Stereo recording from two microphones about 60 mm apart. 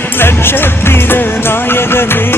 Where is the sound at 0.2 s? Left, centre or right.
Left.